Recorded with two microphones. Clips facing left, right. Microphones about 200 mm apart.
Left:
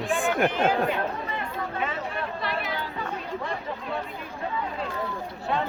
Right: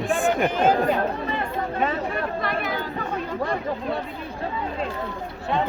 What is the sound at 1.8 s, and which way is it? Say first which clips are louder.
Chatter: right 7 dB; 45° right (ahead or behind).